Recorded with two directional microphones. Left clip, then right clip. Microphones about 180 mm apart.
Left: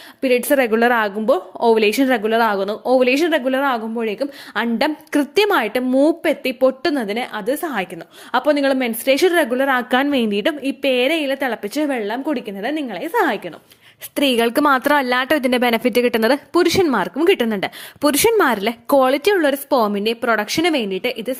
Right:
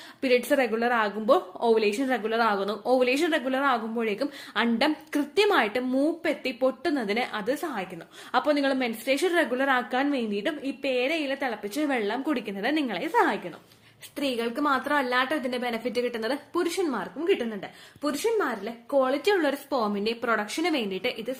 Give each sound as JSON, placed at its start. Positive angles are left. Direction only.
{"t": 0.2, "sound": "a woman's voice", "side_deg": 35}
{"t": 4.5, "sound": "a woman's voice", "side_deg": 40}
{"t": 7.1, "sound": "a woman's voice", "side_deg": 30}
{"t": 9.9, "sound": "a woman's voice", "side_deg": 50}
{"t": 11.9, "sound": "a woman's voice", "side_deg": 30}
{"t": 14.2, "sound": "a woman's voice", "side_deg": 50}